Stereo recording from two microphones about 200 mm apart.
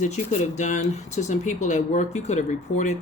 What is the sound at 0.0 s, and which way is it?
Speech, 35° left (ahead or behind).